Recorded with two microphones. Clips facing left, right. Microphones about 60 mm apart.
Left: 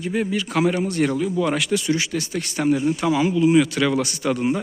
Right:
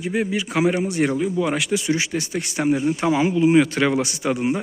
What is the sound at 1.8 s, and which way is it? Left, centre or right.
Speech, right.